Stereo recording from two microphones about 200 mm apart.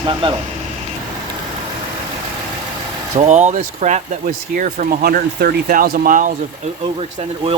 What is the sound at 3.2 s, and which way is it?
Speech, 35° right (ahead or behind).